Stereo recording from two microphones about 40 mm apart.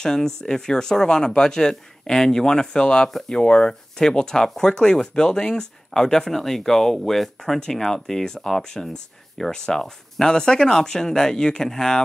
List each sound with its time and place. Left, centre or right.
0.0 s speech: centre